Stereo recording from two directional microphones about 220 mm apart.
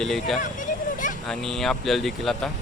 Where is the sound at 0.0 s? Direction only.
Centre (ahead or behind).